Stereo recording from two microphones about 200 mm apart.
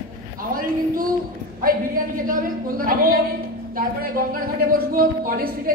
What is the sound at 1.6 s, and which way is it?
Speech, 45° right (ahead or behind).